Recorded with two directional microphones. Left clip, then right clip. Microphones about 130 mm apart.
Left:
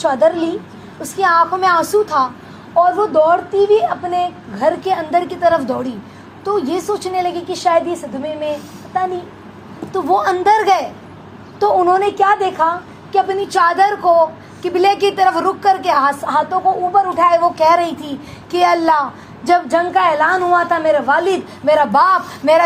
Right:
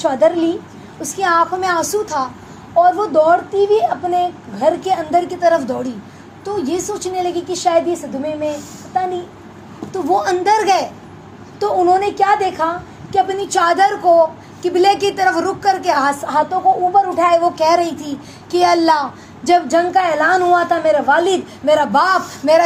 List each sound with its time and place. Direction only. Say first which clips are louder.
0.0 s a woman's voice: even; 20° left (ahead or behind)
9.9 s a woman's voice: left 1 dB; 15° left (ahead or behind)